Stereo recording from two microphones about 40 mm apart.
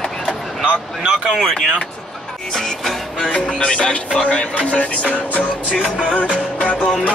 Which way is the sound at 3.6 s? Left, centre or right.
Left.